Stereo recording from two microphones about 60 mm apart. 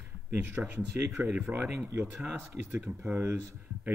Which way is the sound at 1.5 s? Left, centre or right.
Right.